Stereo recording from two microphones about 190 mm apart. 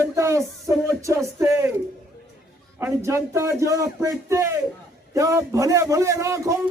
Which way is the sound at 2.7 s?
15° right (ahead or behind).